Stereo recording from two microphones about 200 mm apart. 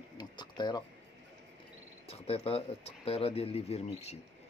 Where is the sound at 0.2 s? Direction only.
20° left (ahead or behind).